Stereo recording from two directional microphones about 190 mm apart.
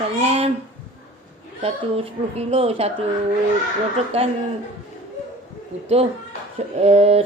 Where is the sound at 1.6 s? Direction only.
30° right (ahead or behind).